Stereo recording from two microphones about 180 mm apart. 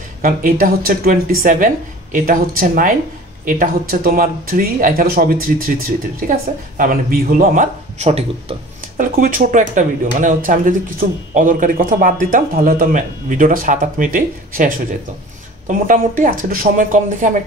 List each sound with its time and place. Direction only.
0.2 s speech: 50° right (ahead or behind)
8.9 s speech: 50° right (ahead or behind)